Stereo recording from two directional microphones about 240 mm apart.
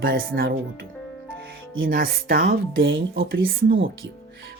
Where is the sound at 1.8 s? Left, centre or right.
Right.